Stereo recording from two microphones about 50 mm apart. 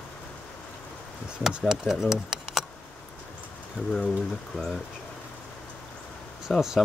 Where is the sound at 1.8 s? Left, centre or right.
Centre.